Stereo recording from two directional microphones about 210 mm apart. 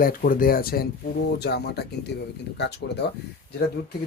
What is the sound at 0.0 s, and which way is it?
Speech, 40° left (ahead or behind).